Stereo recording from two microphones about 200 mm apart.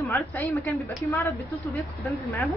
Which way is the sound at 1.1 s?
15° left (ahead or behind).